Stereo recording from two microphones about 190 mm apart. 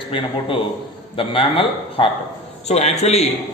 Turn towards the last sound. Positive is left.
turn(degrees=35)  # may be behind; listen again after turning